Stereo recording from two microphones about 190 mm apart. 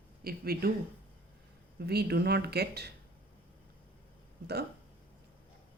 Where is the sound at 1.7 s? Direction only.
55° right (ahead or behind).